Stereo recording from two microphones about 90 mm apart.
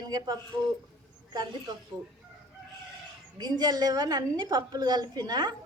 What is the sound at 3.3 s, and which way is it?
A woman's voice, 55° right (ahead or behind).